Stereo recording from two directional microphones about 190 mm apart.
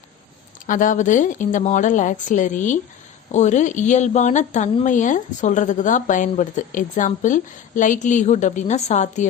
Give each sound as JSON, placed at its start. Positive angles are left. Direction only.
{"t": 0.7, "sound": "speech", "side_deg": 45}